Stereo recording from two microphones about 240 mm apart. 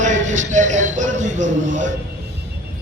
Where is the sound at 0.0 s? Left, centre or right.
Right.